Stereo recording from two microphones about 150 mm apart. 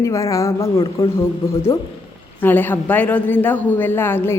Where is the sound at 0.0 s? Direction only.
20° left (ahead or behind).